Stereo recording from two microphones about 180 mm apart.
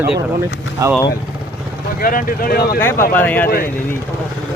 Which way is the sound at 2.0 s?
50° left (ahead or behind).